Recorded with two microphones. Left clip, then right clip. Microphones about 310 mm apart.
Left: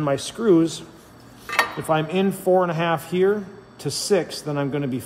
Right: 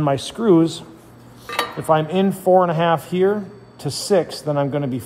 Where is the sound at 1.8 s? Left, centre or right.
Centre.